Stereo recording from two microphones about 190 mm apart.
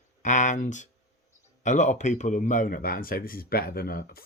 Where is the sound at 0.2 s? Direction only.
40° left (ahead or behind).